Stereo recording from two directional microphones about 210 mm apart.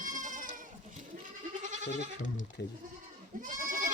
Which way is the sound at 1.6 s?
35° right (ahead or behind).